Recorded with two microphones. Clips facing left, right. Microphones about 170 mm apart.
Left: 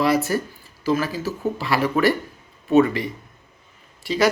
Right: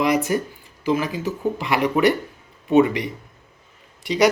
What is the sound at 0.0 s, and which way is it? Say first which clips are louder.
Speech: even; 15° right (ahead or behind).